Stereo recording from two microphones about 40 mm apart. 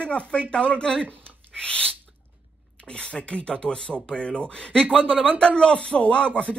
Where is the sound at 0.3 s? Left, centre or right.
Left.